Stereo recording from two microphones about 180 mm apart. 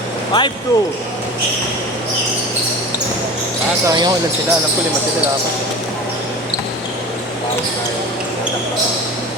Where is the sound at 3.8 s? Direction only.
25° right (ahead or behind).